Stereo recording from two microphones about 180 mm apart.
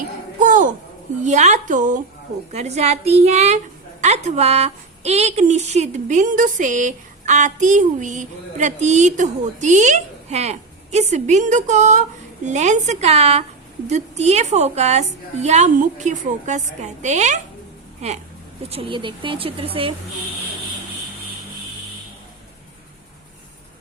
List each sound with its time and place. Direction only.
0.3 s a sound: 45° right (ahead or behind)
1.2 s a woman's voice: 40° right (ahead or behind)
18.7 s a woman's voice: 30° right (ahead or behind)